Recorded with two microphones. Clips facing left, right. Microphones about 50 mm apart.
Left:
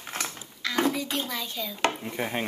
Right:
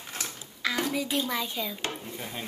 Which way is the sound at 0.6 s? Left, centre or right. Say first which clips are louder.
Right 1 dB; centre.